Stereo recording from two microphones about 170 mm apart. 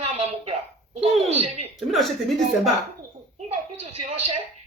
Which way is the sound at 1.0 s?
40° right (ahead or behind).